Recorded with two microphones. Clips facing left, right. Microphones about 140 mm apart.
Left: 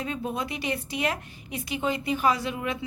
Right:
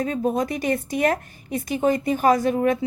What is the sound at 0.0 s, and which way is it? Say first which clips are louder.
A woman's voice: right 8 dB; 45° right (ahead or behind).